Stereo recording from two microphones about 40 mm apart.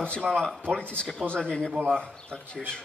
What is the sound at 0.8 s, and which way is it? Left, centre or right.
Speech, left.